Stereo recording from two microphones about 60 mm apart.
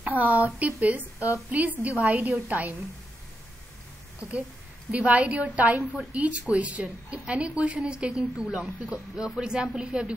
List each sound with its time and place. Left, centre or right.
0.0 s a woman's voice: right
4.2 s a woman's voice: right